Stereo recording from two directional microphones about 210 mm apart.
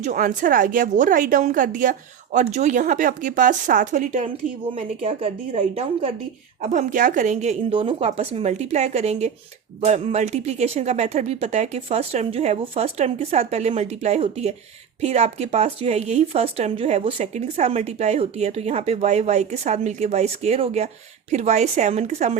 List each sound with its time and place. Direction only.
0.0 s speech: 35° right (ahead or behind)